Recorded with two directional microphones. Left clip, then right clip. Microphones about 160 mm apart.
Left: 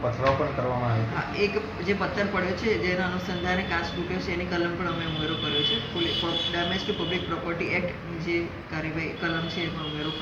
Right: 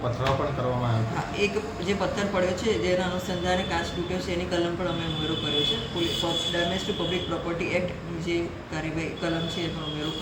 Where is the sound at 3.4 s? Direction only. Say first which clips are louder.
Right 1 dB; 15° right (ahead or behind).